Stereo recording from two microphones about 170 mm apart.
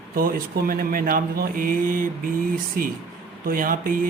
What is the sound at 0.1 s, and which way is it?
Speech, 60° right (ahead or behind).